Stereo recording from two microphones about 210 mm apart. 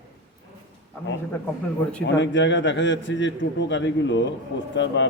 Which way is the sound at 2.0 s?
60° left (ahead or behind).